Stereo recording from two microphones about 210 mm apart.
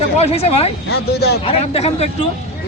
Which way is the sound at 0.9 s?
50° left (ahead or behind).